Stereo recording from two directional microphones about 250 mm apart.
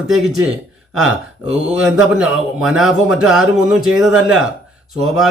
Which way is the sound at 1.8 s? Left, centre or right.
Centre.